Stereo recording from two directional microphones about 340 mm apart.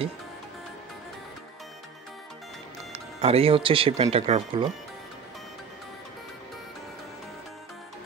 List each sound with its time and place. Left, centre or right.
2.9 s speech: centre